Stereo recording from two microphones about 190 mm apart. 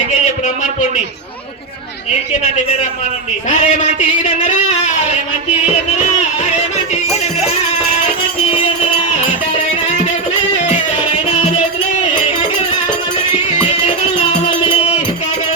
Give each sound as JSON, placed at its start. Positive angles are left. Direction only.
{"t": 3.5, "sound": "a sound", "side_deg": 40}
{"t": 8.4, "sound": "music", "side_deg": 30}
{"t": 13.5, "sound": "music", "side_deg": 30}